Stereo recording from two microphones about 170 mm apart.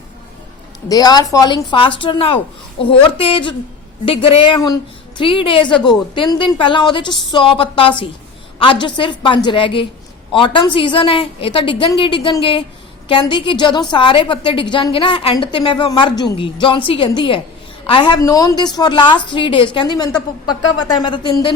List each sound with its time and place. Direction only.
0.9 s a woman's voice: 20° left (ahead or behind)